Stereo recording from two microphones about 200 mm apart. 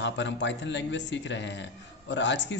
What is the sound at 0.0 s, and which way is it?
Speech, 65° left (ahead or behind).